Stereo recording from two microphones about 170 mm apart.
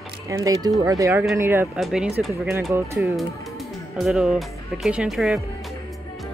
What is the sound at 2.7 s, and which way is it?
Speech, 15° right (ahead or behind).